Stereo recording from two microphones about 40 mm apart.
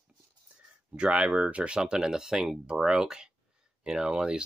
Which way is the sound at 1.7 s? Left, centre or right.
Centre.